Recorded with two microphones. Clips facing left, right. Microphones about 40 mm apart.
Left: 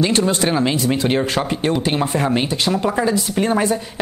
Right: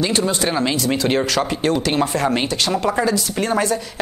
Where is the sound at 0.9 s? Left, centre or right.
Centre.